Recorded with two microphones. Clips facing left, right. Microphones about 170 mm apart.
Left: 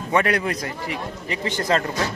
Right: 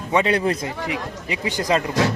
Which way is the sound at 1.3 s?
15° right (ahead or behind).